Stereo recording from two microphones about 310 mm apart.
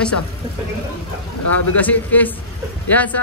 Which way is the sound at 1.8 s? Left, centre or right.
Centre.